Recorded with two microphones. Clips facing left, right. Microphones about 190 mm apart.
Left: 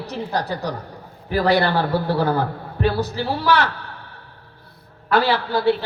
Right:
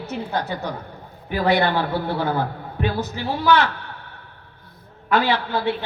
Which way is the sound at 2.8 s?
35° left (ahead or behind).